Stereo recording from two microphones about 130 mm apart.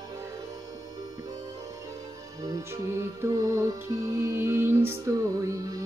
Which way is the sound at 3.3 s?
25° right (ahead or behind).